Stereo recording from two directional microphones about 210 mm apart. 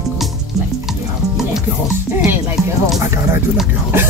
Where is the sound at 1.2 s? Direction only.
15° right (ahead or behind).